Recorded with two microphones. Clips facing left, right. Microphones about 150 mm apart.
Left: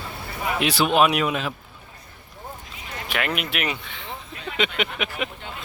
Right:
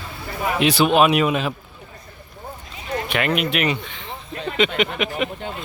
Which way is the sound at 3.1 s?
5° left (ahead or behind).